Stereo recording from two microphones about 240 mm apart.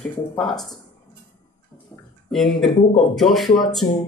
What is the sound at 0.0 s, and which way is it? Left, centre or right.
Speech, centre.